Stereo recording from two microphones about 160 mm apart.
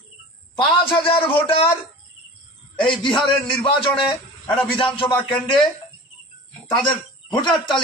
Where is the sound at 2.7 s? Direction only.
30° left (ahead or behind).